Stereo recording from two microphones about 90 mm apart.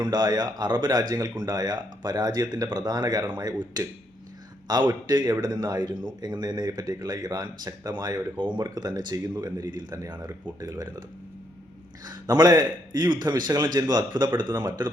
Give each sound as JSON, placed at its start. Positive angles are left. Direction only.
{"t": 0.0, "sound": "speech", "side_deg": -50}
{"t": 4.9, "sound": "speech", "side_deg": -50}
{"t": 8.6, "sound": "speech", "side_deg": -45}
{"t": 10.6, "sound": "speech", "side_deg": -40}
{"t": 12.0, "sound": "speech", "side_deg": -45}